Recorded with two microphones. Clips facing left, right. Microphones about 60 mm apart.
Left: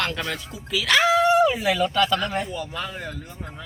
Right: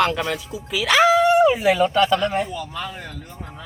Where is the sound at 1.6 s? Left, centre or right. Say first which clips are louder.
Right 4 dB; right.